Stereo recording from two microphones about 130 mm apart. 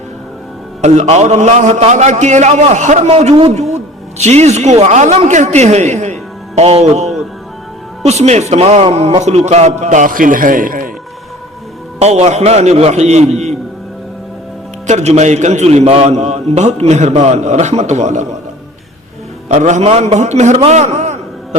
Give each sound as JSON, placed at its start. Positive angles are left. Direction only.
{"t": 0.8, "sound": "a man's voice", "side_deg": -60}
{"t": 3.1, "sound": "a man's voice", "side_deg": -50}
{"t": 11.9, "sound": "a man's voice", "side_deg": -55}
{"t": 14.8, "sound": "a man's voice", "side_deg": -60}
{"t": 19.5, "sound": "a man's voice", "side_deg": -65}